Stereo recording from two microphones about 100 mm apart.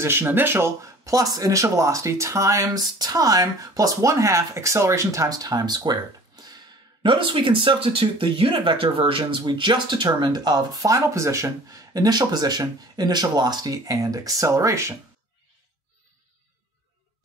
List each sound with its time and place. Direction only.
0.0 s speech: 25° right (ahead or behind)